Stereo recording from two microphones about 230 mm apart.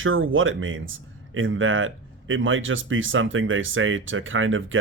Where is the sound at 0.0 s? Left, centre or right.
Right.